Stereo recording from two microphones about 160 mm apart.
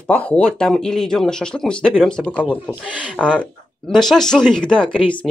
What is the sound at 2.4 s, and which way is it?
Speech, 10° left (ahead or behind).